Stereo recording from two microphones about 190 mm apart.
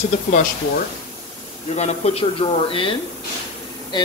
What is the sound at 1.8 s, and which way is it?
Speech, 35° left (ahead or behind).